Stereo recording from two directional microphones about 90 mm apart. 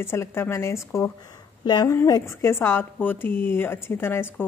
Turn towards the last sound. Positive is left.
turn(degrees=25)  # may be behind; listen again after turning